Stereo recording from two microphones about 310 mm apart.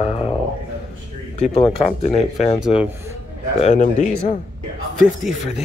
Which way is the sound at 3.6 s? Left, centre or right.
Left.